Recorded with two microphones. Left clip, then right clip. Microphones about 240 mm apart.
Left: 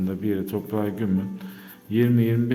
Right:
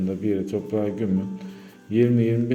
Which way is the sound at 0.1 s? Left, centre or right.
Centre.